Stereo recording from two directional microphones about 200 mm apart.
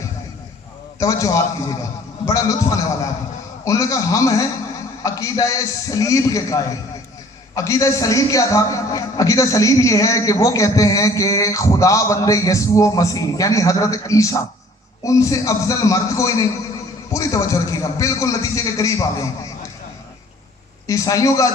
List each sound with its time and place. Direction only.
0.9 s a man's voice: 15° left (ahead or behind)
20.8 s a man's voice: 15° left (ahead or behind)